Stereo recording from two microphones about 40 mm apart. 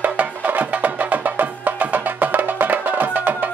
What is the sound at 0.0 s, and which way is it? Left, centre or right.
Music, right.